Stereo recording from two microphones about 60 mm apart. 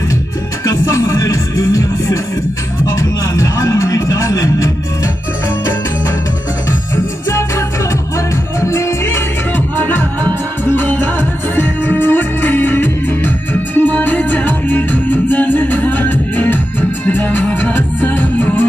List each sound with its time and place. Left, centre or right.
0.7 s music: left
7.2 s music: left
9.8 s music: left